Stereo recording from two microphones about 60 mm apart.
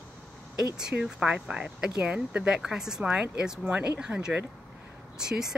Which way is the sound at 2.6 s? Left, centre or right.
Centre.